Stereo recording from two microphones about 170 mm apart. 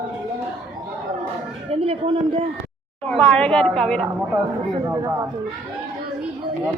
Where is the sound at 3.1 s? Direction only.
5° left (ahead or behind).